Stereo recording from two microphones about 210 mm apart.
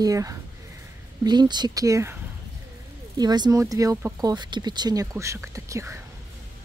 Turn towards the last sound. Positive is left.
turn(degrees=-15)  # may be behind; listen again after turning